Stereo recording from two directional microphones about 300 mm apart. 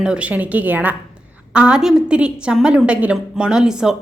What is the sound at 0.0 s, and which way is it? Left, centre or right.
A woman's voice, centre.